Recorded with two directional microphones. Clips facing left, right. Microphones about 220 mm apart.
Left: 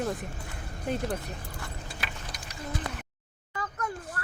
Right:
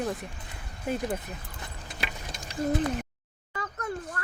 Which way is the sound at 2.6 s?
40° right (ahead or behind).